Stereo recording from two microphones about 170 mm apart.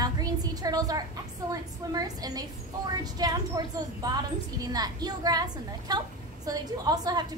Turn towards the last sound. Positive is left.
turn(degrees=-25)  # may be behind; listen again after turning